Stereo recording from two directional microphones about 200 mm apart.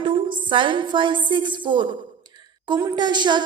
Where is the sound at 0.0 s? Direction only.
25° right (ahead or behind).